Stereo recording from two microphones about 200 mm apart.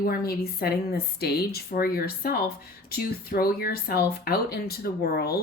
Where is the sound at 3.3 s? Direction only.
50° left (ahead or behind).